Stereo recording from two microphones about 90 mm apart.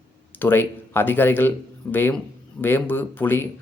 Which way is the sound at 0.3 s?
25° left (ahead or behind).